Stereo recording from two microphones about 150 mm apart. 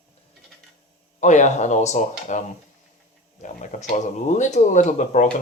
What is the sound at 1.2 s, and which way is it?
Speech, 50° left (ahead or behind).